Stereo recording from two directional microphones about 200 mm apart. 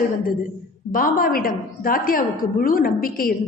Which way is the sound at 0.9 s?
45° left (ahead or behind).